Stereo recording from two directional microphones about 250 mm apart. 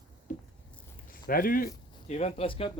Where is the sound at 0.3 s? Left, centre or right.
Left.